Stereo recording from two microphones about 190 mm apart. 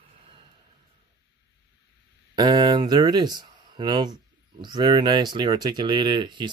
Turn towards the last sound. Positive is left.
turn(degrees=-25)  # may be behind; listen again after turning